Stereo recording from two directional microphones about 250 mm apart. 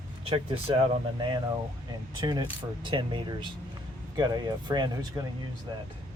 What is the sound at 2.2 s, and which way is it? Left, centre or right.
Speech, centre.